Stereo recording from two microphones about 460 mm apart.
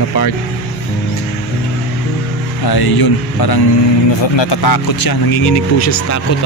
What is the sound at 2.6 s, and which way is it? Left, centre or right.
Speech, left.